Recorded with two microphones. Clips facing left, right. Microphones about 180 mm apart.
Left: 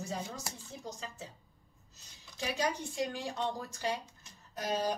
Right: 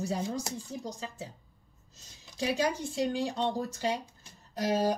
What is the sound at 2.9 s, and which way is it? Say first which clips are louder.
Speech: right 6 dB; 30° right (ahead or behind).